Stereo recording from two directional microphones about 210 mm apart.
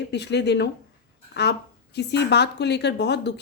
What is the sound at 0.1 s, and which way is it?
A woman's voice, 55° left (ahead or behind).